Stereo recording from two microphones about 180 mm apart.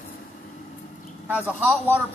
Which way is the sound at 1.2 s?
10° right (ahead or behind).